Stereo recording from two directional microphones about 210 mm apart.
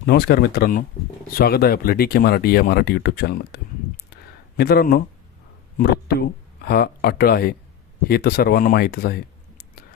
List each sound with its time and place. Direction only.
0.0 s speech: 50° left (ahead or behind)